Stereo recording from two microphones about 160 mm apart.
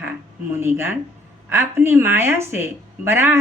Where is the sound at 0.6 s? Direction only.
15° right (ahead or behind).